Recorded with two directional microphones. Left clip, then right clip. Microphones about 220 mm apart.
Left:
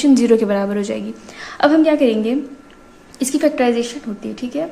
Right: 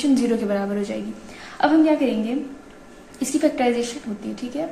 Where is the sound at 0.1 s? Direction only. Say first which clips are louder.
Left 9 dB; 40° left (ahead or behind).